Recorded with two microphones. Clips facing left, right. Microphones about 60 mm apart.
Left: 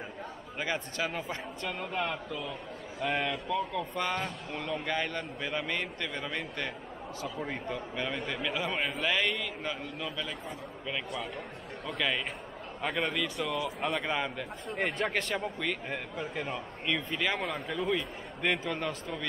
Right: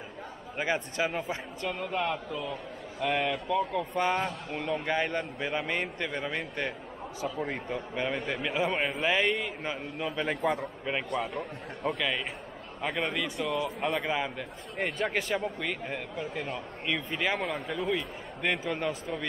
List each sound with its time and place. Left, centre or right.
0.6 s a man's voice: right
1.6 s a man's voice: centre; by 10.1 s right
10.2 s a man's voice: right
11.9 s a man's voice: centre
17.1 s a man's voice: centre
17.4 s a man's voice: centre